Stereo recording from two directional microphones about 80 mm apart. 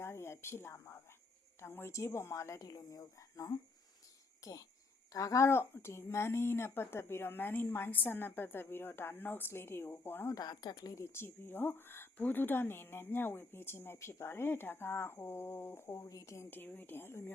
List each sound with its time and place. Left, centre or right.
0.0 s speech: left
2.6 s speech: left
5.5 s speech: left
10.3 s speech: left
16.6 s speech: left